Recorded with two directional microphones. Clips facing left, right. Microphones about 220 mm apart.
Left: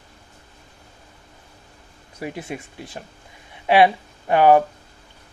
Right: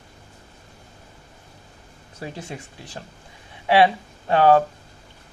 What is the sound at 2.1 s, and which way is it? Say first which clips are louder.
Speech: left 4 dB; 15° left (ahead or behind).